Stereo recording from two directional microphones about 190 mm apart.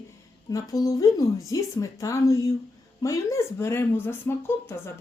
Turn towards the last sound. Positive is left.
turn(degrees=15)  # may be behind; listen again after turning